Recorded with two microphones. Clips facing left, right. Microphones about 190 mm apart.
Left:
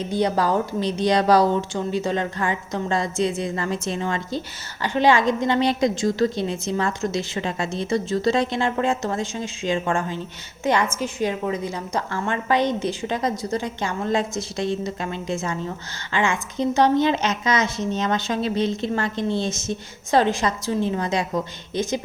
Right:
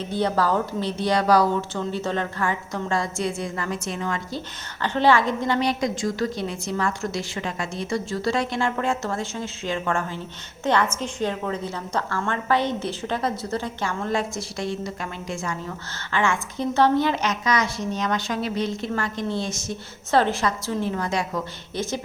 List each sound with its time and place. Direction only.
0.0 s a woman's voice: 15° left (ahead or behind)